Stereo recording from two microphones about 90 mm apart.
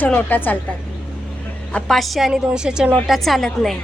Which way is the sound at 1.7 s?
5° left (ahead or behind).